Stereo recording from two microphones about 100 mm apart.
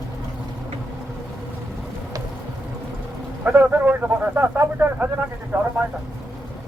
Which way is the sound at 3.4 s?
15° right (ahead or behind).